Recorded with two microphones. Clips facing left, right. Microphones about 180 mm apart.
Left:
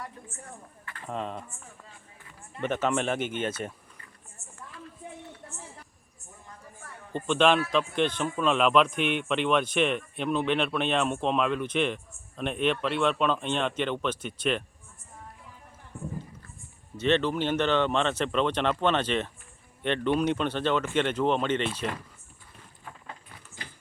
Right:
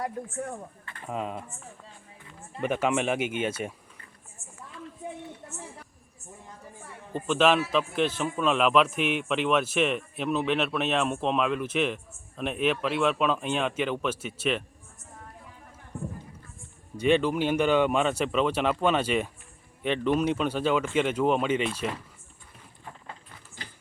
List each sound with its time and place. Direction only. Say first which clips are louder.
1.0 s speech: right 1 dB; 5° right (ahead or behind)
2.6 s speech: right 1 dB; 10° right (ahead or behind)
7.1 s speech: even; 5° right (ahead or behind)
15.9 s a sound: right 2 dB; 35° right (ahead or behind)
17.0 s speech: right 2 dB; 10° right (ahead or behind)